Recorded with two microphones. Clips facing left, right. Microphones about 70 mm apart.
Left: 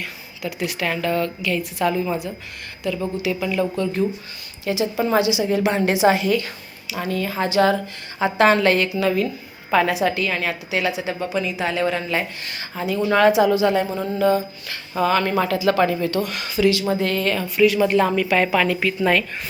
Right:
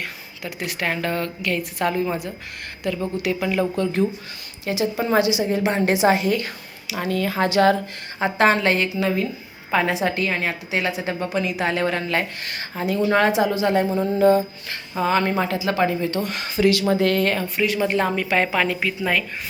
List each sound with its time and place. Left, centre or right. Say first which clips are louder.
0.6 s a woman's voice: left 1 dB; right
2.8 s speech: even; right
4.6 s a woman's voice: left 1 dB; right
6.8 s a woman's voice: right 1 dB; right
8.2 s a woman's voice: left 2 dB; right
13.9 s speech: right 3 dB; centre
14.2 s a woman's voice: right 2 dB; right
16.9 s a woman's voice: right 2 dB; right
17.6 s a woman's voice: left 6 dB; right